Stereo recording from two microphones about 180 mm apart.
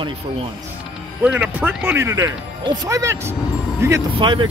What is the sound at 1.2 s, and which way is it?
Speech, 5° right (ahead or behind).